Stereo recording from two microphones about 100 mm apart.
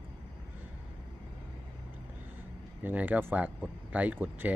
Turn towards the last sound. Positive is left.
turn(degrees=-15)  # may be behind; listen again after turning